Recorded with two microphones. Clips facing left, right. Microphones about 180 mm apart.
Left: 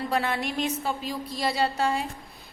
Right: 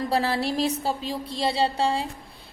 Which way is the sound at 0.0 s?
35° right (ahead or behind).